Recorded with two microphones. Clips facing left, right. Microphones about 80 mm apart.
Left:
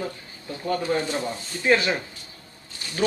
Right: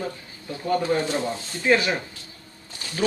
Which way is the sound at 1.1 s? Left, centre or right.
Centre.